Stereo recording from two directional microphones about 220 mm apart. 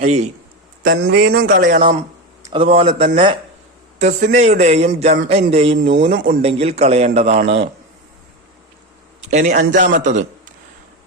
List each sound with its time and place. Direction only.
0.0 s speech: 30° right (ahead or behind)
1.2 s a man's voice: 45° right (ahead or behind)
2.4 s a man's voice: 25° right (ahead or behind)
5.7 s speech: 50° right (ahead or behind)
6.0 s a man's voice: 35° right (ahead or behind)
9.3 s a man's voice: 35° right (ahead or behind)